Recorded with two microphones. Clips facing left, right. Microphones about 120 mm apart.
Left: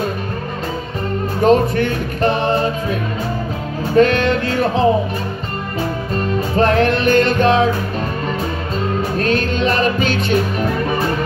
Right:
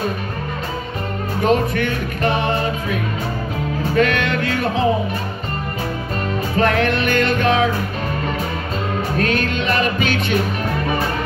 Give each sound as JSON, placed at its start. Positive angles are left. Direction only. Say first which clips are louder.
{"t": 1.4, "sound": "music", "louder": "left 4 dB", "side_deg": 35}
{"t": 6.5, "sound": "music", "louder": "left 3 dB", "side_deg": 35}
{"t": 9.2, "sound": "music", "louder": "left 3 dB", "side_deg": 35}